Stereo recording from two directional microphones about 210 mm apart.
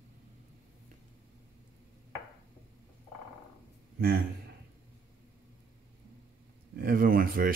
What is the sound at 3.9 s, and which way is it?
Speech, 45° right (ahead or behind).